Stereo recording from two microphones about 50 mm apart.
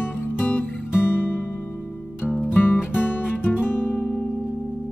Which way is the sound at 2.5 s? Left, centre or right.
Left.